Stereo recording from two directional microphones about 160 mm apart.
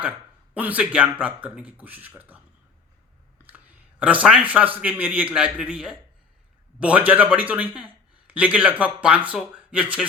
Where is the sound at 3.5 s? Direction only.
10° right (ahead or behind).